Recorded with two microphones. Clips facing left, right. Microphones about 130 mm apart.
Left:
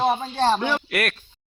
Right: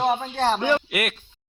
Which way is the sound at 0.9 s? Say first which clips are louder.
Left 1 dB; 15° right (ahead or behind).